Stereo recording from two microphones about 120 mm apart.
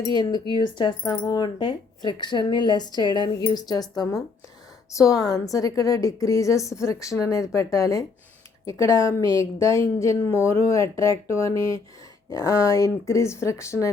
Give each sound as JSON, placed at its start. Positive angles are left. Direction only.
{"t": 0.2, "sound": "a woman's voice", "side_deg": 35}